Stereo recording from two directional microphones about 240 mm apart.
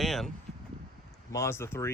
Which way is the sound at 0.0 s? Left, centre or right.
Centre.